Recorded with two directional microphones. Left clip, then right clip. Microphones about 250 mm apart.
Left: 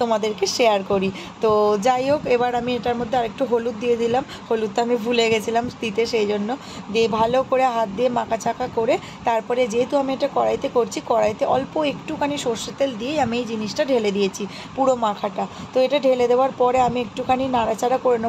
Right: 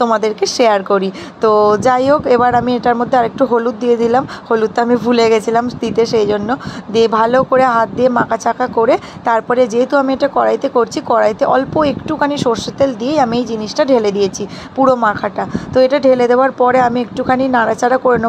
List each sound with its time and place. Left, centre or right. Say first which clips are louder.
0.0 s speech: right 7 dB; centre